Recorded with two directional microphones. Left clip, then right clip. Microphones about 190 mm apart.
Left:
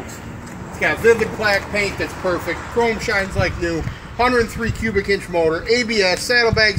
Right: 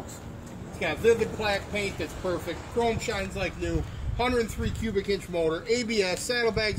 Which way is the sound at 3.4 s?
40° right (ahead or behind).